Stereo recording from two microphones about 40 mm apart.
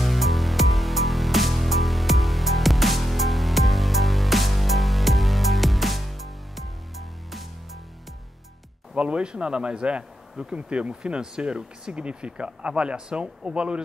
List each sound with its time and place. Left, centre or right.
0.0 s music: centre
8.9 s speech: right